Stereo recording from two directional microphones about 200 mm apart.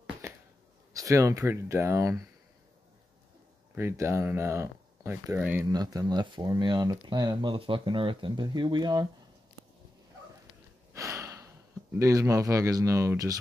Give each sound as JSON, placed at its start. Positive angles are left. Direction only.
{"t": 0.9, "sound": "speech", "side_deg": -15}
{"t": 3.7, "sound": "speech", "side_deg": -10}
{"t": 10.9, "sound": "a sound", "side_deg": -15}
{"t": 12.0, "sound": "speech", "side_deg": -15}